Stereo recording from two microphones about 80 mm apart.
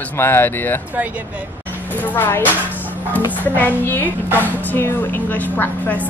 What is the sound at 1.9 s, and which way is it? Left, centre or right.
Speech, left.